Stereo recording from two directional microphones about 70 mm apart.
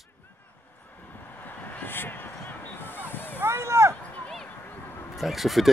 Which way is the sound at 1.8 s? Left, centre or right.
Left.